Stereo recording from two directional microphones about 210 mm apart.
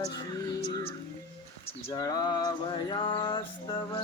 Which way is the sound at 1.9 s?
20° left (ahead or behind).